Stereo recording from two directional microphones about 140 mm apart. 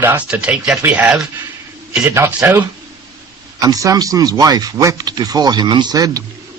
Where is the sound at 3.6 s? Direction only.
25° right (ahead or behind).